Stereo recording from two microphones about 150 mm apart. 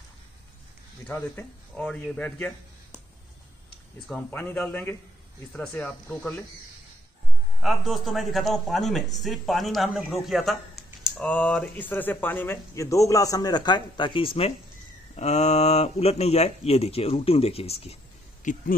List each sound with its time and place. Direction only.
1.8 s speech: 5° left (ahead or behind)
4.3 s speech: 10° left (ahead or behind)
7.6 s a man's voice: centre (ahead or behind); by 14.5 s 35° left (ahead or behind)
15.1 s speech: 50° left (ahead or behind)
18.4 s speech: 60° left (ahead or behind)